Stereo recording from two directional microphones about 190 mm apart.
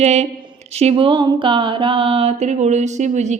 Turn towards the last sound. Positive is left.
turn(degrees=-40)  # may be behind; listen again after turning